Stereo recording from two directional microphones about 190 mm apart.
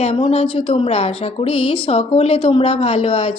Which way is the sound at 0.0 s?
35° left (ahead or behind).